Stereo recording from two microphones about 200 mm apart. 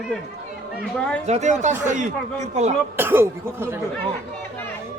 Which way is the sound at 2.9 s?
10° right (ahead or behind).